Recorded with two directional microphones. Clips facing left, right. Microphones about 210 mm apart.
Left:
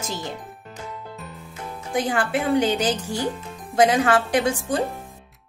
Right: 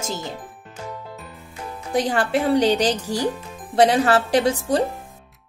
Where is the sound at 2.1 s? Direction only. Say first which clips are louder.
Right 2 dB; 35° right (ahead or behind).